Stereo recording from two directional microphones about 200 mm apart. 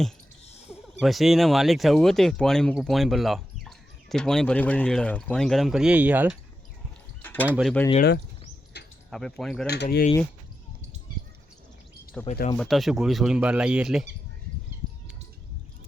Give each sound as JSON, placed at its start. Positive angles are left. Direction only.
{"t": 0.7, "sound": "speech", "side_deg": 0}
{"t": 7.2, "sound": "a sound", "side_deg": 10}
{"t": 7.4, "sound": "speech", "side_deg": -5}
{"t": 9.0, "sound": "speech", "side_deg": 0}
{"t": 9.6, "sound": "speech", "side_deg": 55}
{"t": 12.3, "sound": "speech", "side_deg": 40}
{"t": 12.5, "sound": "speech", "side_deg": 0}